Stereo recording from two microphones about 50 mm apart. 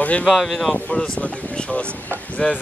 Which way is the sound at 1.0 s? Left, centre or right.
Centre.